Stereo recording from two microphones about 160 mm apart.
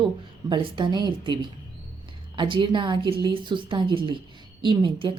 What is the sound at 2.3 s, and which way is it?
Speech, 30° right (ahead or behind).